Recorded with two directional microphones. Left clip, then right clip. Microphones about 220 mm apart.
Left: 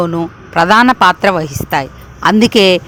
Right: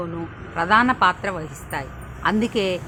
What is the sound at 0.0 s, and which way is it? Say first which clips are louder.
A woman's voice: left 14 dB; 50° left (ahead or behind).